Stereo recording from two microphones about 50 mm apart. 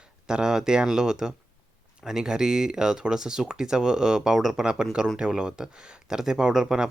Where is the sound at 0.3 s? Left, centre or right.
Centre.